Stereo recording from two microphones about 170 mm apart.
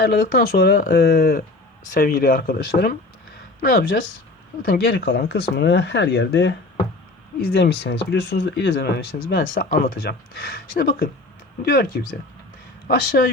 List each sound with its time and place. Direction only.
0.0 s speech: 60° left (ahead or behind)
1.9 s speech: 55° left (ahead or behind); by 6.6 s 90° left
7.4 s speech: 75° left (ahead or behind)